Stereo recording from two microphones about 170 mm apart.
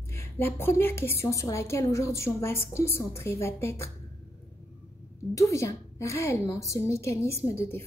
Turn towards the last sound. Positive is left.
turn(degrees=15)  # may be behind; listen again after turning